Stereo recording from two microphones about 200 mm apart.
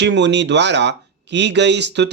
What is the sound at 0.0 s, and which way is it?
Speech, 60° right (ahead or behind).